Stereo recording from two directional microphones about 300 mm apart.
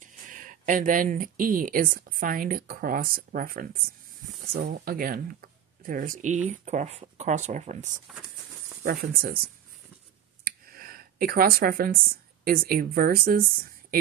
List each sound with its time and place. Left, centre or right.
0.0 s speech: right
10.4 s a sound: right
12.4 s speech: right